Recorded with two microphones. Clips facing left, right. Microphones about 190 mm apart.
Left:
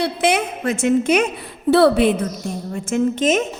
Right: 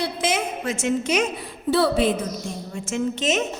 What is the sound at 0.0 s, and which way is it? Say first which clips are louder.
A woman's voice: left 5 dB; 65° left (ahead or behind).